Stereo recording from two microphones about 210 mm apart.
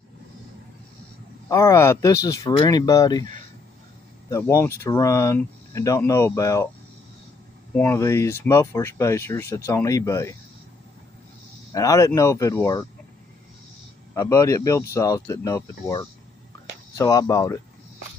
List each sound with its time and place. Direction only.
1.5 s speech: 15° left (ahead or behind)
4.3 s speech: 15° left (ahead or behind)
7.7 s speech: 10° left (ahead or behind)
11.7 s speech: 15° left (ahead or behind)
14.1 s speech: 15° left (ahead or behind)